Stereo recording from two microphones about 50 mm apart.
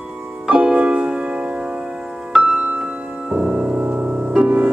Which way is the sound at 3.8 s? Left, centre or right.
Right.